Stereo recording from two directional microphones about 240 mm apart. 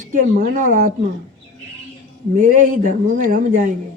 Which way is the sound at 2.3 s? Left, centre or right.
Right.